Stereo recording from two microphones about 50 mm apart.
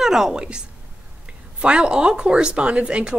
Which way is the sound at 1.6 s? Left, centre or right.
Right.